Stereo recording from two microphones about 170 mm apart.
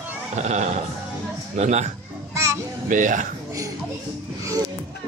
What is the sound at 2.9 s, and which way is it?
Speech, 50° right (ahead or behind).